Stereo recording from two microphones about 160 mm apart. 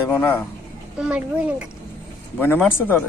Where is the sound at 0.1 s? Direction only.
10° left (ahead or behind).